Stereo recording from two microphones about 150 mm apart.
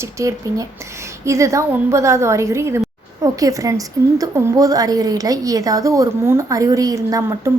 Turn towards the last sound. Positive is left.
turn(degrees=-25)  # may be behind; listen again after turning